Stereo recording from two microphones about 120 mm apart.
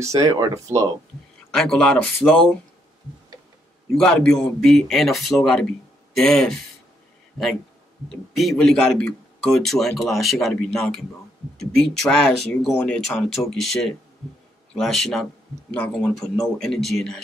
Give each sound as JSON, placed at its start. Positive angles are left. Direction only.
{"t": 0.0, "sound": "speech", "side_deg": -25}
{"t": 1.5, "sound": "speech", "side_deg": 5}
{"t": 3.9, "sound": "speech", "side_deg": 5}
{"t": 8.1, "sound": "speech", "side_deg": 0}